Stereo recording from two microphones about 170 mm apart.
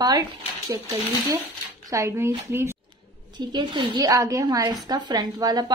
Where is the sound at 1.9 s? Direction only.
15° right (ahead or behind).